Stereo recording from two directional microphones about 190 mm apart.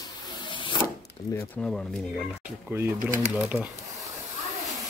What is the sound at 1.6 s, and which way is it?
Speech, centre (ahead or behind).